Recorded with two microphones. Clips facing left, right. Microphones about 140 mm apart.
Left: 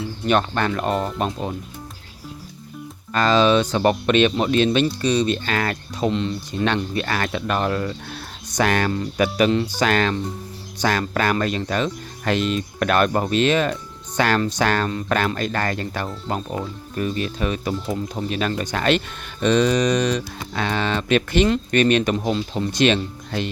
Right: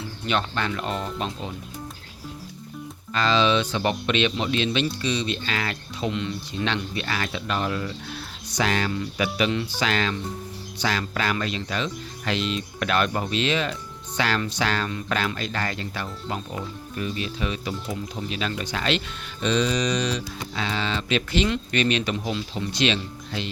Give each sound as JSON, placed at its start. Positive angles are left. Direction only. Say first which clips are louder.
{"t": 0.3, "sound": "speech", "louder": "left 6 dB", "side_deg": 50}
{"t": 3.1, "sound": "speech", "louder": "left 5 dB", "side_deg": 45}